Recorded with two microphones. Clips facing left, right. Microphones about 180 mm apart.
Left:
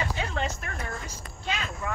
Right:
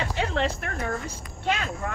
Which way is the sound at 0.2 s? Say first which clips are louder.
Right 10 dB; 70° right (ahead or behind).